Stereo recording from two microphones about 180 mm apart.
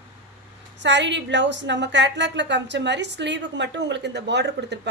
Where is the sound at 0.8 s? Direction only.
80° right.